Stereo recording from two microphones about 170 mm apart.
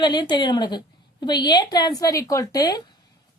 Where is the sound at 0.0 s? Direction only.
25° left (ahead or behind).